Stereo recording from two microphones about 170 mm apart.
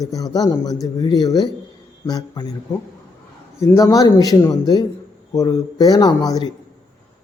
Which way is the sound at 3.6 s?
20° left (ahead or behind).